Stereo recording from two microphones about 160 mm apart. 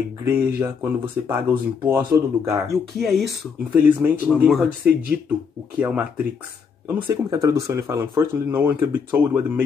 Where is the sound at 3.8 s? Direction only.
10° right (ahead or behind).